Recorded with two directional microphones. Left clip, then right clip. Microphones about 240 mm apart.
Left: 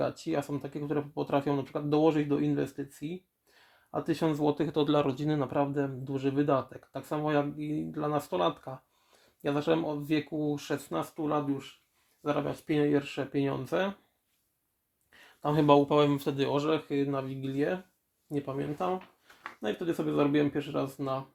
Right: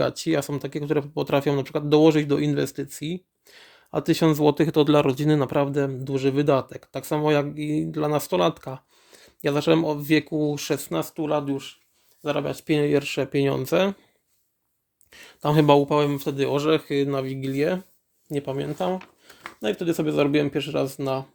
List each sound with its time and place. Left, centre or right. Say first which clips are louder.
0.0 s speech: right 8 dB; right
15.1 s speech: right 8 dB; right